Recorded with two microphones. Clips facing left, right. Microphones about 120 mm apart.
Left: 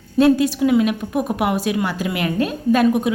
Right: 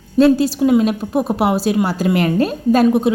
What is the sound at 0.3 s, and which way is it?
A woman's voice, 30° right (ahead or behind).